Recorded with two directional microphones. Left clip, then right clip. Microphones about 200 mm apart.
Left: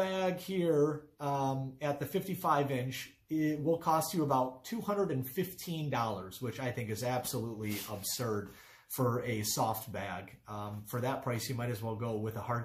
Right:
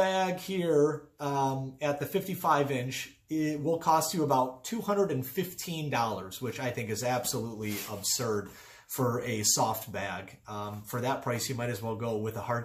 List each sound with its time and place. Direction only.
0.0 s speech: 5° right (ahead or behind)